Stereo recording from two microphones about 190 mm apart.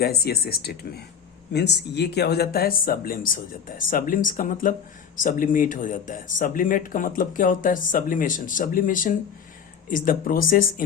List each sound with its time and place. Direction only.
0.0 s speech: 55° left (ahead or behind)